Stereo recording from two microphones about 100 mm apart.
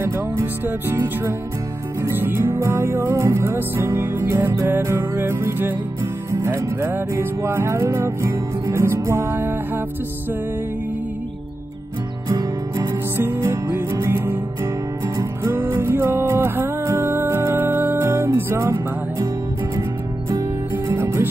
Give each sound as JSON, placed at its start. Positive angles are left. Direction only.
{"t": 0.0, "sound": "music", "side_deg": -20}
{"t": 12.3, "sound": "music", "side_deg": -35}
{"t": 13.2, "sound": "music", "side_deg": -25}
{"t": 20.2, "sound": "music", "side_deg": -30}